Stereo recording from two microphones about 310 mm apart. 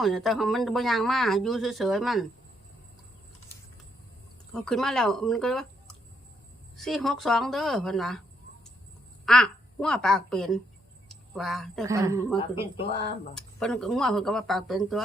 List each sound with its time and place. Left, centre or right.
0.0 s speech: centre
4.5 s speech: centre
9.2 s a woman's voice: centre
11.9 s a woman's voice: centre
12.7 s speech: centre
13.3 s speech: centre